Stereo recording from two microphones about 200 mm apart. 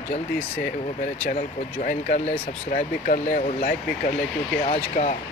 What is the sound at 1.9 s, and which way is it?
Speech, 40° left (ahead or behind).